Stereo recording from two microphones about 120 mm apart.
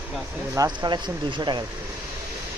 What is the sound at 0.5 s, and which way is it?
Speech, 30° right (ahead or behind).